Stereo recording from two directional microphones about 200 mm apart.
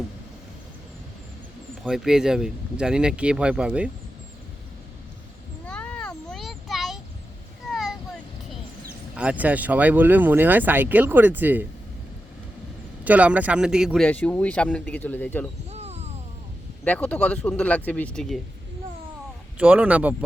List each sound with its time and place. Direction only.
1.8 s speech: centre (ahead or behind)
5.6 s a sound: 5° left (ahead or behind)
9.1 s speech: 5° right (ahead or behind)
13.1 s speech: 5° right (ahead or behind); by 15.4 s 10° left (ahead or behind)
15.7 s music: 30° right (ahead or behind)
16.8 s speech: 5° left (ahead or behind)
19.5 s speech: 5° right (ahead or behind)